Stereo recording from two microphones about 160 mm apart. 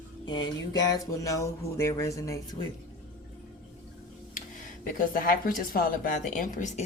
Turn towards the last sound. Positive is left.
turn(degrees=50)  # may be behind; listen again after turning